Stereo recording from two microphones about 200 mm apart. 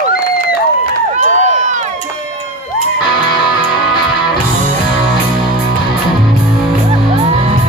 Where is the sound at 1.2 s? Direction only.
35° right (ahead or behind).